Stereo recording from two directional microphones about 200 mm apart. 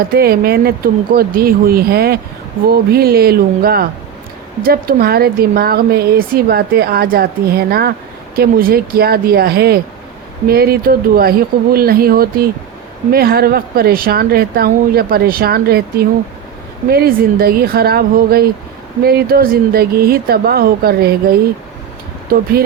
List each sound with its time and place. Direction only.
0.1 s speech: 50° right (ahead or behind)